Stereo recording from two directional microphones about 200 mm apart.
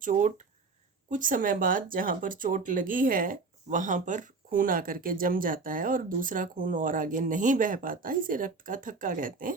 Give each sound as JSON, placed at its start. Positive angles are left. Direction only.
{"t": 0.0, "sound": "speech", "side_deg": -40}